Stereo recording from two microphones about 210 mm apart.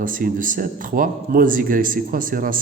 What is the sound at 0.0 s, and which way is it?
A man's voice, 40° right (ahead or behind).